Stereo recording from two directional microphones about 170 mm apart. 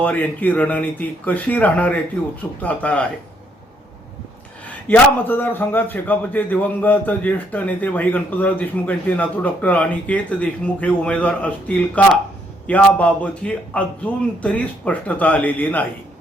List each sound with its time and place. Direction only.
0.0 s a man's voice: 10° left (ahead or behind)
4.9 s a man's voice: 10° left (ahead or behind)